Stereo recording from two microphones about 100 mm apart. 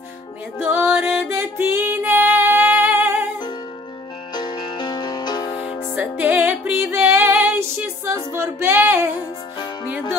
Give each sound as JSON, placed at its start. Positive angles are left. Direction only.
{"t": 0.6, "sound": "music", "side_deg": -20}
{"t": 4.3, "sound": "music", "side_deg": 45}
{"t": 5.9, "sound": "music", "side_deg": -15}